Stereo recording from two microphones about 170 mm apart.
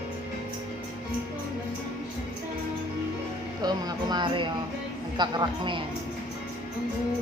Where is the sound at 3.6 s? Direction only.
25° right (ahead or behind).